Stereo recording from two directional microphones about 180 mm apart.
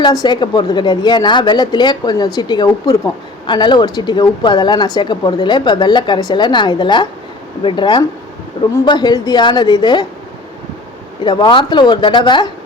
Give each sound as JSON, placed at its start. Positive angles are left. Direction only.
{"t": 0.0, "sound": "speech", "side_deg": 20}
{"t": 11.2, "sound": "speech", "side_deg": 25}